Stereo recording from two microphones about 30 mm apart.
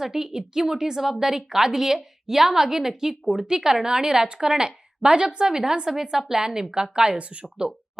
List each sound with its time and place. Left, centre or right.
0.0 s a woman's voice: centre
3.4 s speech: right